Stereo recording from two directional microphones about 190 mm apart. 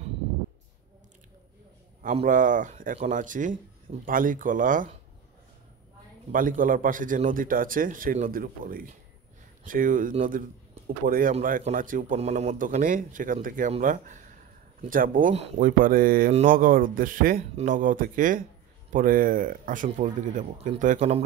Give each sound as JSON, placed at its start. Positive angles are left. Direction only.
{"t": 2.0, "sound": "speech", "side_deg": -45}
{"t": 6.3, "sound": "speech", "side_deg": -45}